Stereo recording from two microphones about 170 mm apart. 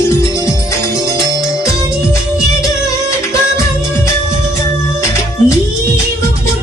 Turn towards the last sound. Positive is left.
turn(degrees=15)  # may be behind; listen again after turning